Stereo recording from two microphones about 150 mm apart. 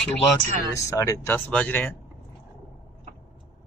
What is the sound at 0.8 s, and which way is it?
Speech, 20° left (ahead or behind).